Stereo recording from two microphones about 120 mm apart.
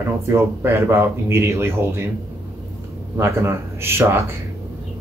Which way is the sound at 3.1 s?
20° right (ahead or behind).